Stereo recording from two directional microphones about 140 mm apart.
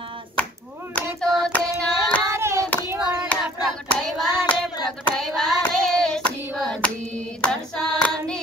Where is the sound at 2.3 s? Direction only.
20° right (ahead or behind).